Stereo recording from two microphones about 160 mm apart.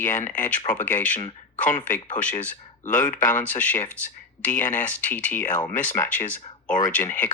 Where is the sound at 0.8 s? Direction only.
10° left (ahead or behind).